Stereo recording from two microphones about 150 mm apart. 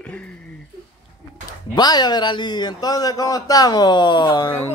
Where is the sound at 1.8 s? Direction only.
25° left (ahead or behind).